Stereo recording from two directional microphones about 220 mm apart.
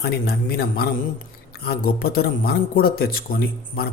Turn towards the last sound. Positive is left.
turn(degrees=45)  # may be behind; listen again after turning